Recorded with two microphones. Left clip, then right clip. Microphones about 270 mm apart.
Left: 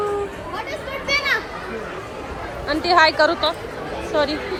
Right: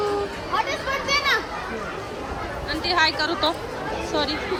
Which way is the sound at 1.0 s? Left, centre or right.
Right.